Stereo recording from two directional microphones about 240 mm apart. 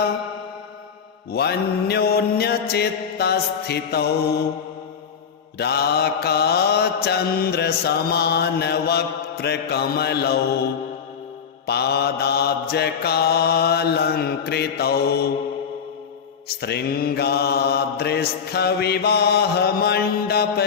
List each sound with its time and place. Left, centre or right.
1.3 s mantra: left
5.5 s mantra: left
16.6 s mantra: left